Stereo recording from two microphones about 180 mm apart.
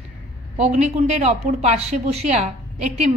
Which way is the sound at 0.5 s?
35° right (ahead or behind).